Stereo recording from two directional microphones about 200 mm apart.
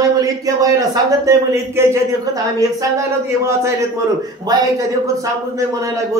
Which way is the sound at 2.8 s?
15° right (ahead or behind).